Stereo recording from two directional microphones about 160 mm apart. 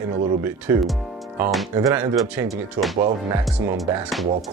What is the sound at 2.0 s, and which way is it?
Speech, 10° right (ahead or behind).